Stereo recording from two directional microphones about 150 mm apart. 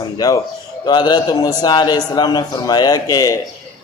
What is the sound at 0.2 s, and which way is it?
A man's voice, 25° left (ahead or behind).